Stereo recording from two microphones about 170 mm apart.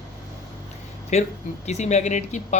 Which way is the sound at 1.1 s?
40° left (ahead or behind).